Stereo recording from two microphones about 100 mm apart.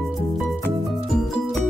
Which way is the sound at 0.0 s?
Centre (ahead or behind).